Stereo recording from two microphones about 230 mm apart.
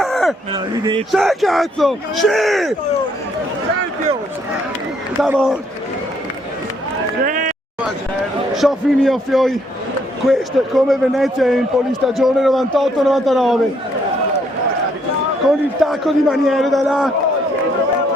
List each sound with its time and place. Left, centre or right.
0.0 s a sound: centre
0.5 s speech: centre
1.1 s a man's voice: centre
5.2 s a man's voice: centre
7.3 s run: right
8.5 s a man's voice: centre
15.4 s a man's voice: centre